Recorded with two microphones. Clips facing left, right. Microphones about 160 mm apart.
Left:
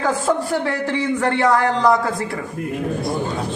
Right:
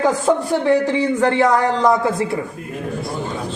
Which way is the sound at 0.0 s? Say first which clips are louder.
Right 3 dB; 20° right (ahead or behind).